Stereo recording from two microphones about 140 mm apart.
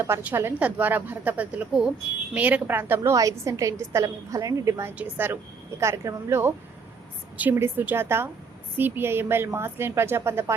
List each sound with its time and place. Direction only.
0.0 s a woman's voice: 15° right (ahead or behind)